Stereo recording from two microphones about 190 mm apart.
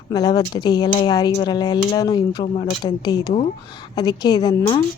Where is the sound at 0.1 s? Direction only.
20° left (ahead or behind).